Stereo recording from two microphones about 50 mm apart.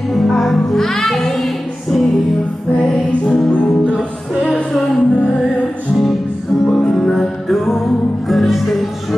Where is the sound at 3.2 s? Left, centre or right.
Left.